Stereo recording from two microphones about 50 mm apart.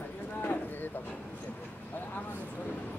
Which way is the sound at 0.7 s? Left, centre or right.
Left.